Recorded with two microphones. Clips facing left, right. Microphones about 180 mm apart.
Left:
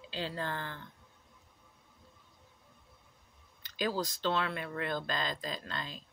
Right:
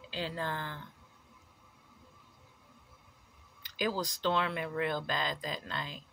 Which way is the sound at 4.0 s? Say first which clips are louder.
Right 1 dB; 15° right (ahead or behind).